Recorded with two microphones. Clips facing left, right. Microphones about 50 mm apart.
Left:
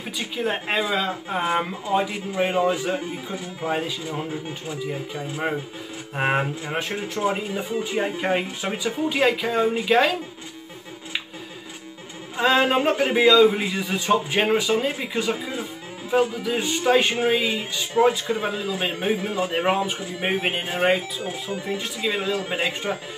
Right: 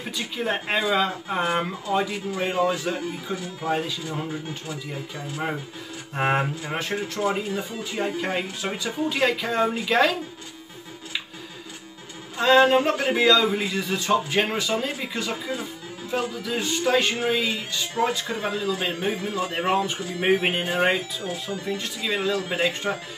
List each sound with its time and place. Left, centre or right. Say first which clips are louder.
0.4 s speech: left 1 dB; centre
7.2 s speech: left 2 dB; centre
12.4 s speech: right 2 dB; centre
21.3 s speech: even; left
21.7 s speech: left 3 dB; centre